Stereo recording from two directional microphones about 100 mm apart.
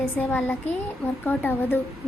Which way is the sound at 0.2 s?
20° left (ahead or behind).